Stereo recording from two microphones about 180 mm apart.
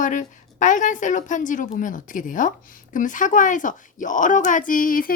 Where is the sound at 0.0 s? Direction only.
45° left (ahead or behind).